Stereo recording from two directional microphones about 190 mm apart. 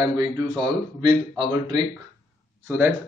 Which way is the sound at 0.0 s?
15° right (ahead or behind).